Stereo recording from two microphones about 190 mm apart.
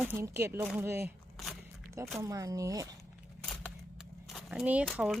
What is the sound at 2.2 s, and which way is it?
Speech, 20° right (ahead or behind).